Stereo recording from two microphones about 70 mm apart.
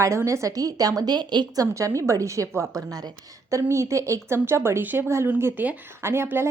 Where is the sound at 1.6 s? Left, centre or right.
Right.